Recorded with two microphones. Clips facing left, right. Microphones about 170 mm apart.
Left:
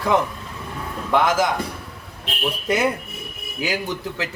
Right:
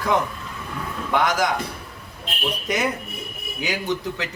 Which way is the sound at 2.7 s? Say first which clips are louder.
Left 4 dB; 5° left (ahead or behind).